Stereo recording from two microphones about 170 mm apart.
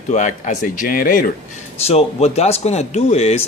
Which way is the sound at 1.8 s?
40° left (ahead or behind).